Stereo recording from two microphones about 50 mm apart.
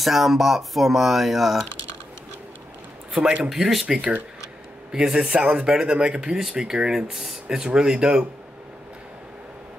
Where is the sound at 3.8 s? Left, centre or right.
Centre.